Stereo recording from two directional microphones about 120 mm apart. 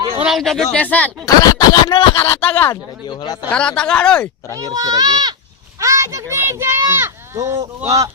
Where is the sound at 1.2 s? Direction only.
30° left (ahead or behind).